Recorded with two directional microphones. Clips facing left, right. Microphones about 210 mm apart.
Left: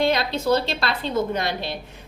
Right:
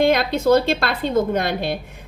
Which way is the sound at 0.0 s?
50° right (ahead or behind).